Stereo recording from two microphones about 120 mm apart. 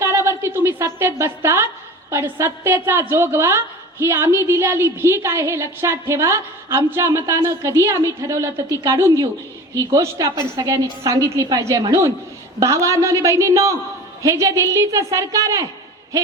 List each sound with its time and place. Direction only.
0.0 s a woman's voice: 25° right (ahead or behind)